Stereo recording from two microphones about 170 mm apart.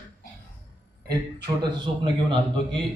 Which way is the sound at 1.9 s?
35° right (ahead or behind).